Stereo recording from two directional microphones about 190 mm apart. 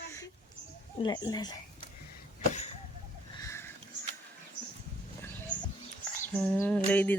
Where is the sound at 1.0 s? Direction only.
20° left (ahead or behind).